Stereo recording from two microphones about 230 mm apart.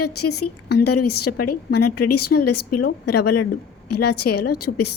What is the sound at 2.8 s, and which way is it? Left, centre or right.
Speech, left.